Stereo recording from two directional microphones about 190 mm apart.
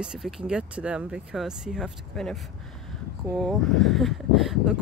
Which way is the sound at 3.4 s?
Centre (ahead or behind).